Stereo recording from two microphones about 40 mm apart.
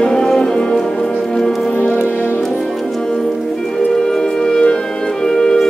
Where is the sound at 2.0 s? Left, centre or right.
Left.